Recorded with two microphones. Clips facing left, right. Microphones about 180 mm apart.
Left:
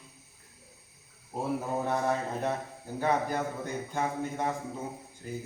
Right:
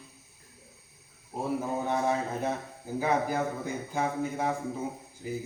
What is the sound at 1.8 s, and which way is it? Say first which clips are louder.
Speech: right 1 dB; centre (ahead or behind).